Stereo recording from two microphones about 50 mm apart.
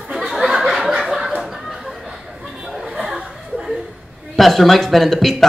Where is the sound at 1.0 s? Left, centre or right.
Centre.